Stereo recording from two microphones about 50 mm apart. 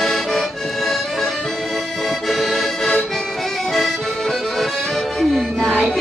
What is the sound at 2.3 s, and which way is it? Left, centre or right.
Accordion, centre.